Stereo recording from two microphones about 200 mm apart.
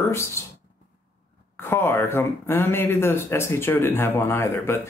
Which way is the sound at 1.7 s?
10° left (ahead or behind).